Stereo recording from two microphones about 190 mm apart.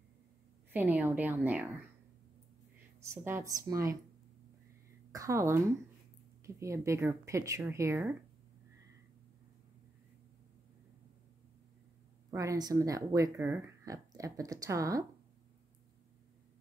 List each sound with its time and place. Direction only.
0.7 s speech: 10° right (ahead or behind)
3.0 s speech: 15° right (ahead or behind)
5.1 s a woman's voice: 15° right (ahead or behind)
12.3 s speech: 15° right (ahead or behind)